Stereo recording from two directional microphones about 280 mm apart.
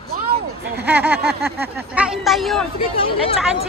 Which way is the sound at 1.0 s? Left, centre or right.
Right.